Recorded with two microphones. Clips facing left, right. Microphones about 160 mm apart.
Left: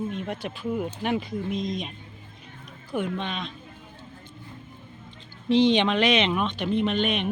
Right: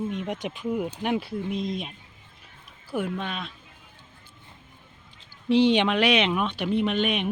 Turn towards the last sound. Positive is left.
turn(degrees=-10)  # may be behind; listen again after turning